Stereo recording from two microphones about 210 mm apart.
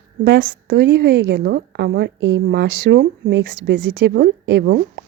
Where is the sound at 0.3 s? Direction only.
55° right (ahead or behind).